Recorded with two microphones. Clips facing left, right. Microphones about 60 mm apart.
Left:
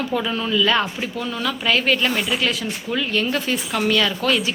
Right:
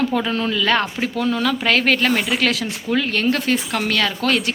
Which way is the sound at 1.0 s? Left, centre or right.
Right.